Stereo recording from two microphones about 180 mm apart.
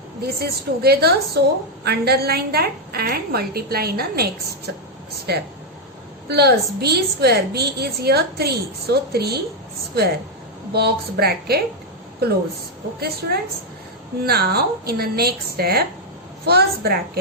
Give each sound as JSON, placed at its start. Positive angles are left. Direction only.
{"t": 0.3, "sound": "a woman's voice", "side_deg": -60}
{"t": 13.0, "sound": "a woman's voice", "side_deg": -60}